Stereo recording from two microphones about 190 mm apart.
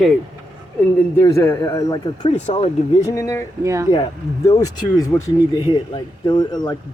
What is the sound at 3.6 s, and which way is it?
Speech, 15° right (ahead or behind).